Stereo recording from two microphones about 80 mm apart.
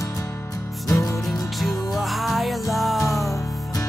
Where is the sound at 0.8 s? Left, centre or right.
Left.